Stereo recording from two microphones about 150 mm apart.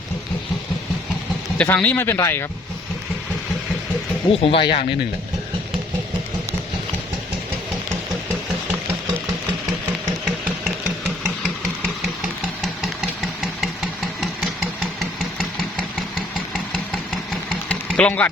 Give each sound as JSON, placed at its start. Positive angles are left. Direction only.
{"t": 1.5, "sound": "speech", "side_deg": 10}
{"t": 4.3, "sound": "speech", "side_deg": 40}
{"t": 12.0, "sound": "engine", "side_deg": -5}
{"t": 16.7, "sound": "engine", "side_deg": 5}